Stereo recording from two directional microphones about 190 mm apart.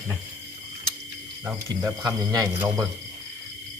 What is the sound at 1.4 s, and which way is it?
Speech, 15° right (ahead or behind).